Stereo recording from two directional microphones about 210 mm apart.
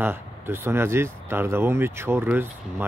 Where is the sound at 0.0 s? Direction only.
10° right (ahead or behind).